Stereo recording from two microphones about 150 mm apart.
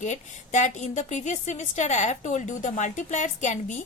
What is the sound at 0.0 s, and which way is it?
A woman's voice, 55° left (ahead or behind).